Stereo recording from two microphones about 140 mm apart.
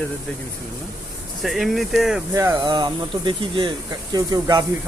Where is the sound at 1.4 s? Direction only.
Centre (ahead or behind).